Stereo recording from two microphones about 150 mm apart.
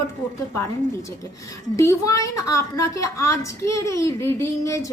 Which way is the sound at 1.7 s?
20° left (ahead or behind).